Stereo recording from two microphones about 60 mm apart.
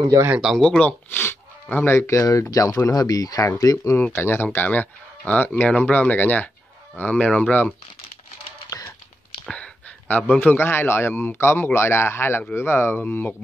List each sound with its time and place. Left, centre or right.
0.6 s speech: centre
1.1 s a sound: left
2.0 s speech: left
2.5 s speech: left
3.5 s speech: left
3.9 s a man's voice: left
4.6 s speech: left
8.6 s a sound: left
9.5 s a sound: left
10.4 s a man's voice: left